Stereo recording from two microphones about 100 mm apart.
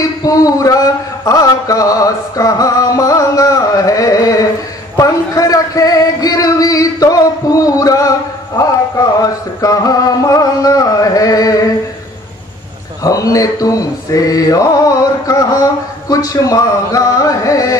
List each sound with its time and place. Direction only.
0.2 s mantra: 35° left (ahead or behind)
8.5 s music: 35° left (ahead or behind)
13.0 s mantra: 35° left (ahead or behind)